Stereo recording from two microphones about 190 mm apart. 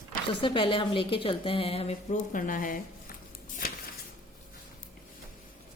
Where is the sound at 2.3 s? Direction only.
45° left (ahead or behind).